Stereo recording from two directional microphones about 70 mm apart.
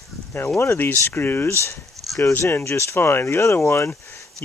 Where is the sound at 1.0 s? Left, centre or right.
Left.